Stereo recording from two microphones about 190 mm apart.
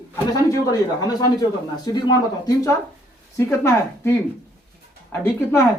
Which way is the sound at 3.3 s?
15° left (ahead or behind).